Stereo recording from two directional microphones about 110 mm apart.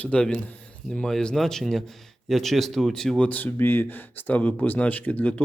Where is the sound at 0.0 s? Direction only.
10° left (ahead or behind).